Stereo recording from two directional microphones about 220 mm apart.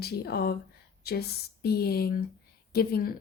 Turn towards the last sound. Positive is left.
turn(degrees=45)  # may be behind; listen again after turning